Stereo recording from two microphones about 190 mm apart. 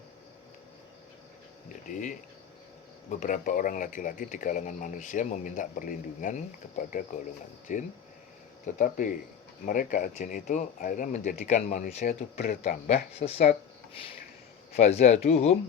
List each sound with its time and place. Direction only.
3.1 s speech: 40° left (ahead or behind)
12.9 s speech: 35° left (ahead or behind)
14.8 s speech: 35° left (ahead or behind)